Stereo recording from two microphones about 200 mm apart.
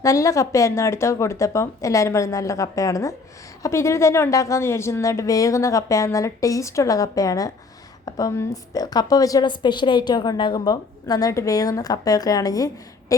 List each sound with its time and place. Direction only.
0.0 s a woman's voice: 15° left (ahead or behind)